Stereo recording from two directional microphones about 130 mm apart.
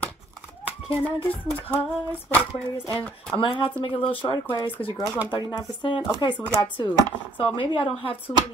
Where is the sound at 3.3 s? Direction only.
45° left (ahead or behind).